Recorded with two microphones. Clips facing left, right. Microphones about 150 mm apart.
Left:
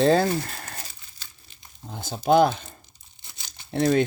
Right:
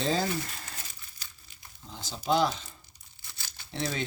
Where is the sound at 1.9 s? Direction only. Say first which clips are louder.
Left 8 dB; 55° left (ahead or behind).